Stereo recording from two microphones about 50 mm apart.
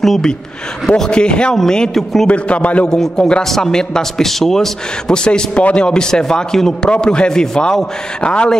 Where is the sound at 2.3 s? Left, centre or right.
Left.